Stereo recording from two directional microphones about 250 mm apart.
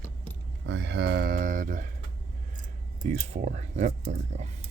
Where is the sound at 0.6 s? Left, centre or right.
Right.